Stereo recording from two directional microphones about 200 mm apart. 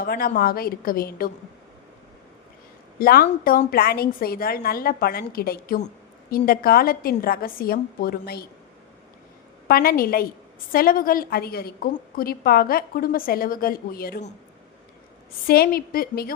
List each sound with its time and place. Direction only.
0.0 s a woman's voice: 45° left (ahead or behind)
3.0 s a woman's voice: 50° left (ahead or behind)
9.6 s a woman's voice: 50° left (ahead or behind)
15.4 s a woman's voice: 50° left (ahead or behind)